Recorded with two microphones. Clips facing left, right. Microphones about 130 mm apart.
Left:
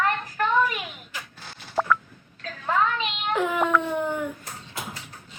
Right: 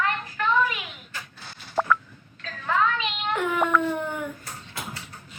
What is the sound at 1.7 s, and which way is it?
Telephone dialing, centre (ahead or behind).